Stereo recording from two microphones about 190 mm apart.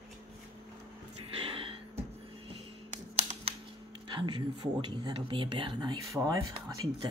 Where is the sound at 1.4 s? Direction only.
30° right (ahead or behind).